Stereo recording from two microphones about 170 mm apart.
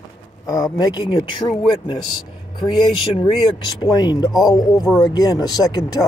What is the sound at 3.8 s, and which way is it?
Speech, 25° left (ahead or behind).